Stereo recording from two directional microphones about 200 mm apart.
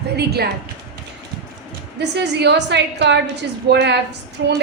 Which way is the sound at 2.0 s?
60° right (ahead or behind).